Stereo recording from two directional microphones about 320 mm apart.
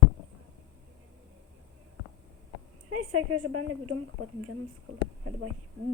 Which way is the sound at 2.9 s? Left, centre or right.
Right.